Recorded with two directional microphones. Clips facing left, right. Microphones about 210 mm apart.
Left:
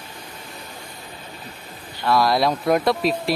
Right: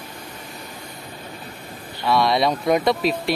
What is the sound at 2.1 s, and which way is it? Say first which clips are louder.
Speech: even; centre (ahead or behind).